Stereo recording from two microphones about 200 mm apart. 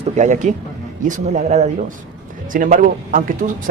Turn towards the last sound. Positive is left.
turn(degrees=-45)  # may be behind; listen again after turning